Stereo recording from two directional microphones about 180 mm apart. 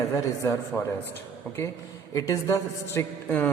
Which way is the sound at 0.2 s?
15° left (ahead or behind).